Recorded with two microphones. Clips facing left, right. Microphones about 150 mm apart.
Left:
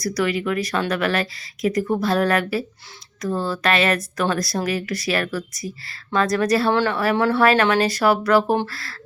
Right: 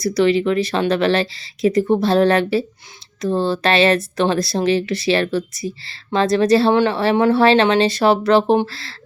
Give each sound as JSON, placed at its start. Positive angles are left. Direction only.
{"t": 0.0, "sound": "speech", "side_deg": -25}